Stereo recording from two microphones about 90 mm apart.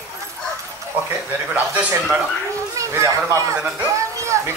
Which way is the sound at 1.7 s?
30° right (ahead or behind).